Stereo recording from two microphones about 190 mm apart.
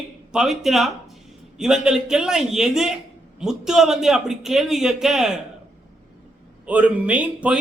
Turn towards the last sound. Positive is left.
turn(degrees=-5)  # may be behind; listen again after turning